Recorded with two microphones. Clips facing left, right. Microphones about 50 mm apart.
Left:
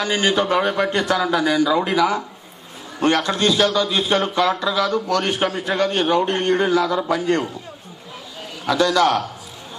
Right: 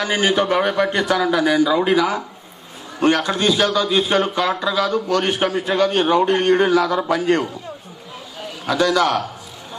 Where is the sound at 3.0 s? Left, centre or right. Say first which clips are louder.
Right 1 dB; centre.